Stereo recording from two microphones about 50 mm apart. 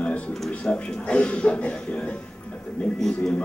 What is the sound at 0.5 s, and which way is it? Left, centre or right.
Speech, left.